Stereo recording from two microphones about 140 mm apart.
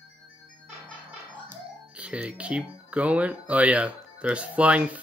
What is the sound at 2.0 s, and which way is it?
Speech, 10° right (ahead or behind).